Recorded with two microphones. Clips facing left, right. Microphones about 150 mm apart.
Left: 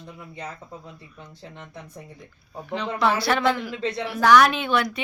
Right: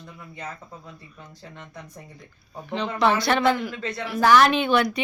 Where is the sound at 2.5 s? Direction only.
5° left (ahead or behind).